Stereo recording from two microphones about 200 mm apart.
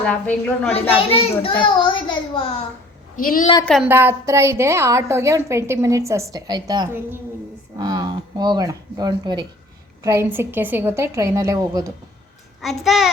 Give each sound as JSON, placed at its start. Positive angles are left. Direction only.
{"t": 0.0, "sound": "a woman's voice", "side_deg": 5}
{"t": 0.7, "sound": "a child's voice", "side_deg": 30}
{"t": 3.2, "sound": "a woman's voice", "side_deg": 45}
{"t": 3.4, "sound": "a child's voice", "side_deg": 20}
{"t": 3.8, "sound": "a woman's voice", "side_deg": -10}
{"t": 12.6, "sound": "a woman's voice", "side_deg": 0}